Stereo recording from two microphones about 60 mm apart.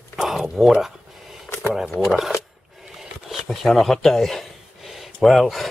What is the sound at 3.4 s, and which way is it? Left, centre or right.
Speech, centre.